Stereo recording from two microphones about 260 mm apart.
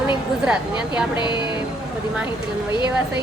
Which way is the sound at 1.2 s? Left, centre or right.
Centre.